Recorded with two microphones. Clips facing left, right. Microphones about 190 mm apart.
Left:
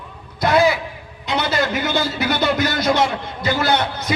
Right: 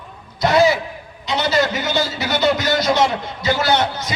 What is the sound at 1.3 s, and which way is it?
A man's voice, 55° left (ahead or behind).